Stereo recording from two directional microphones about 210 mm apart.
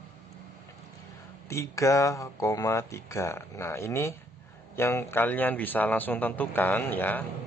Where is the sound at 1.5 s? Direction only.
15° left (ahead or behind).